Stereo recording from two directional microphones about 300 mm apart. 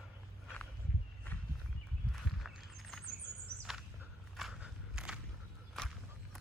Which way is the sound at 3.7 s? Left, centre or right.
Centre.